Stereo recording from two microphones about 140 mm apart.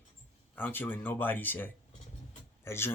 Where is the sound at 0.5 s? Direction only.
15° left (ahead or behind).